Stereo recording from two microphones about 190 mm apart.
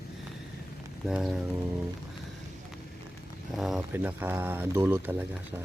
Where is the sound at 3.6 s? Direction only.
Centre (ahead or behind).